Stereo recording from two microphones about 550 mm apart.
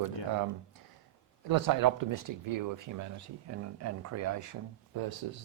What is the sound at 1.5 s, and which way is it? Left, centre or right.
Speech, right.